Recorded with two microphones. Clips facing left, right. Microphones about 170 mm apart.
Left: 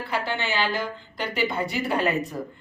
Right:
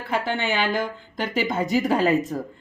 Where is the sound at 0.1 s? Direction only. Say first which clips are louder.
Right 4 dB; 50° right (ahead or behind).